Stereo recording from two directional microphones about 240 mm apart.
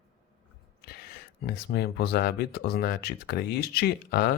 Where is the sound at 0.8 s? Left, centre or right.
Left.